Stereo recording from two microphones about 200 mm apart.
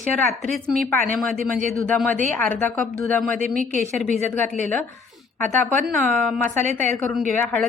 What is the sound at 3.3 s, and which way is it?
Speech, 45° right (ahead or behind).